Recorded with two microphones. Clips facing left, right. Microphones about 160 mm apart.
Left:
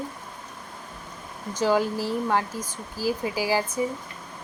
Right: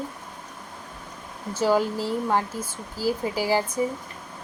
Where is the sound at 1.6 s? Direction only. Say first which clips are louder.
Right 1 dB; 15° right (ahead or behind).